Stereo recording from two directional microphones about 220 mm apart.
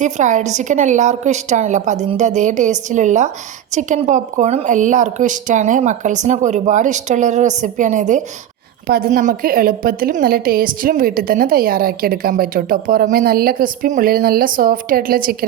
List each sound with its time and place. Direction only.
0.0 s a woman's voice: 35° right (ahead or behind)